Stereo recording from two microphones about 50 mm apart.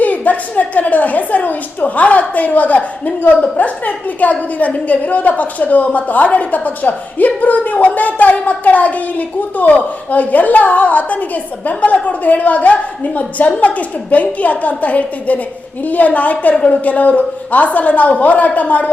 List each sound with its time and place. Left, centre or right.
0.0 s a woman's voice: left